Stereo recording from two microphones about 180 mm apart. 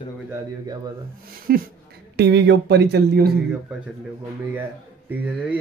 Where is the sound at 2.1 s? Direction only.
70° right (ahead or behind).